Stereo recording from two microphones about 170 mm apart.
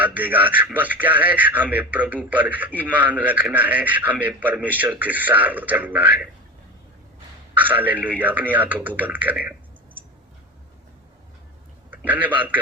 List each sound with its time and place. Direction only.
0.0 s a man's voice: 10° right (ahead or behind)
7.5 s a man's voice: 10° right (ahead or behind)
11.9 s a man's voice: 10° right (ahead or behind)